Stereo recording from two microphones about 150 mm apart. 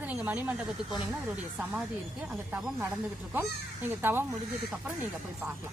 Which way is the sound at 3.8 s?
15° right (ahead or behind).